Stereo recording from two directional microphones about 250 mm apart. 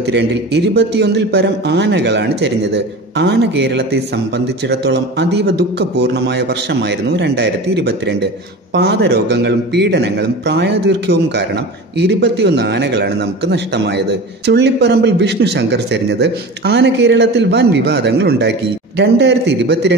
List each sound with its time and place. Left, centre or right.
0.0 s a man's voice: right